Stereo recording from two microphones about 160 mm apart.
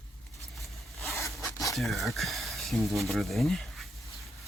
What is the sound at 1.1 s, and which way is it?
Zipper, 20° left (ahead or behind).